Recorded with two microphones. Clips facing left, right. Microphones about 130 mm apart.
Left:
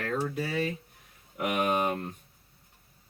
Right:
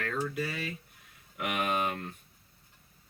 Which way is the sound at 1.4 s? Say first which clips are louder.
Left 4 dB; 20° left (ahead or behind).